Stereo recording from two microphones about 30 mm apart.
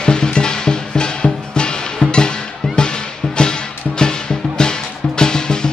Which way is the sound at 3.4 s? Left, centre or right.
Left.